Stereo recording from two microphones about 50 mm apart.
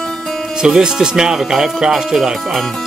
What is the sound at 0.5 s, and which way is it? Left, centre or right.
Speech, centre.